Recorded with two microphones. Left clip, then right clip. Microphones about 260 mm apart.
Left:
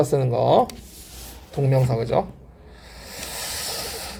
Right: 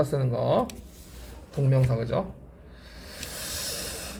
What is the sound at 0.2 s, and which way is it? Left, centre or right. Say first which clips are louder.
Speech: left 7 dB; left.